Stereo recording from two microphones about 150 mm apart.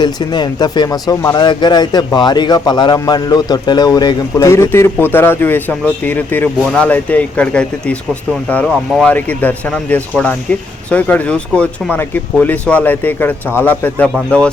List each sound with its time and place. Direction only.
0.0 s a man's voice: 30° left (ahead or behind); by 14.5 s 5° left (ahead or behind)